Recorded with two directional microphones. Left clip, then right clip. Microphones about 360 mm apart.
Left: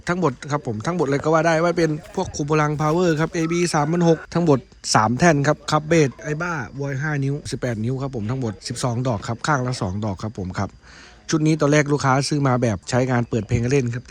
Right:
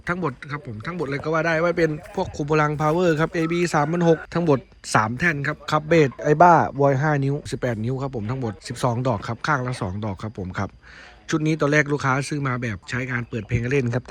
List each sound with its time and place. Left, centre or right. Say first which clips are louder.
0.0 s speech: left 4 dB; centre